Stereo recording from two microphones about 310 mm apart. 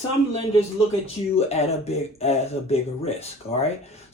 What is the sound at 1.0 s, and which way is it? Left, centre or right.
Speech, centre.